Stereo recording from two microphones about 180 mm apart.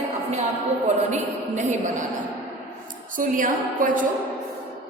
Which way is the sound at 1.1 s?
45° right (ahead or behind).